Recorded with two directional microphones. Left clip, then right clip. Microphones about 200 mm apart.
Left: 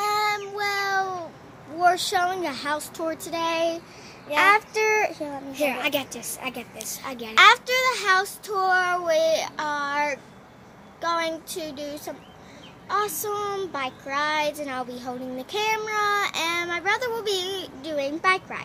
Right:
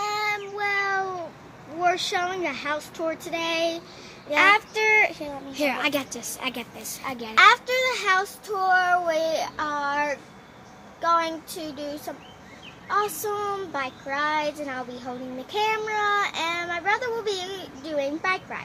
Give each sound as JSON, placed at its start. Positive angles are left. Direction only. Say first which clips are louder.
{"t": 0.0, "sound": "child singing", "louder": "left 3 dB", "side_deg": 20}
{"t": 1.8, "sound": "child singing", "louder": "left 3 dB", "side_deg": 15}
{"t": 5.5, "sound": "a woman's voice", "louder": "even", "side_deg": -15}
{"t": 6.4, "sound": "a woman's voice", "louder": "right 2 dB", "side_deg": -30}
{"t": 7.0, "sound": "a woman's voice", "louder": "right 3 dB", "side_deg": -15}
{"t": 7.3, "sound": "child singing", "louder": "left 1 dB", "side_deg": 20}
{"t": 12.8, "sound": "a child's voice", "louder": "right 1 dB", "side_deg": 15}